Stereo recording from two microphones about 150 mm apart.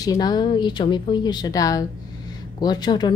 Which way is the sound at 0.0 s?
25° left (ahead or behind).